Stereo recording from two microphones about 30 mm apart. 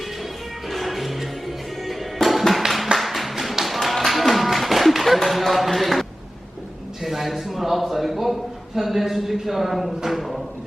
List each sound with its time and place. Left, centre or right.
0.7 s music: centre
2.6 s a sound: right
3.0 s clapping: centre
3.4 s music: centre
5.4 s a sound: centre
10.1 s speech: centre